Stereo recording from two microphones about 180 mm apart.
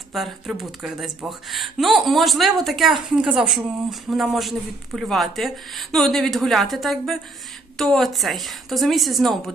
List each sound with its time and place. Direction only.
0.1 s speech: centre (ahead or behind)